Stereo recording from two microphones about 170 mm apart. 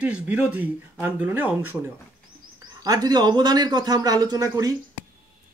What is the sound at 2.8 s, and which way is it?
A man's voice, 20° right (ahead or behind).